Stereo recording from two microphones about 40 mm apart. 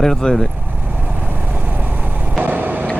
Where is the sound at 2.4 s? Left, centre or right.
Right.